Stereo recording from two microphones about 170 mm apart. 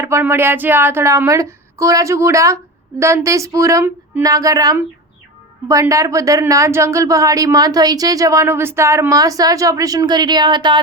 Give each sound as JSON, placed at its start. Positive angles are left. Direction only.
{"t": 0.0, "sound": "a woman's voice", "side_deg": -15}